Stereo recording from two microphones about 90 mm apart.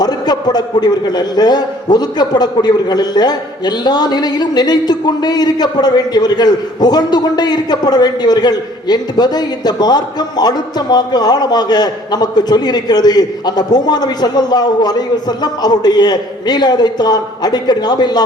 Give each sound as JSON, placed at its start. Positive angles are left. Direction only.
{"t": 0.0, "sound": "a man's voice", "side_deg": 50}